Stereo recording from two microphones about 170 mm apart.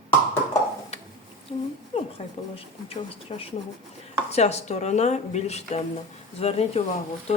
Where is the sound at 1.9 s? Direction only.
35° left (ahead or behind).